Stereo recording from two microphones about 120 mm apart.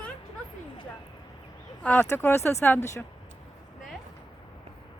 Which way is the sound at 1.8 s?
10° left (ahead or behind).